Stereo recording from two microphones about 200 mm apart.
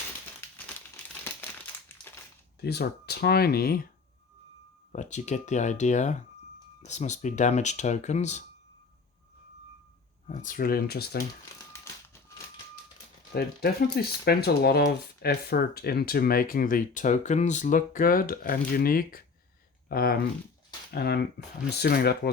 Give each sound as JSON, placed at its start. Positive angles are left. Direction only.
{"t": 2.6, "sound": "speech", "side_deg": 55}
{"t": 4.9, "sound": "speech", "side_deg": 35}
{"t": 10.2, "sound": "speech", "side_deg": 40}
{"t": 13.3, "sound": "speech", "side_deg": 50}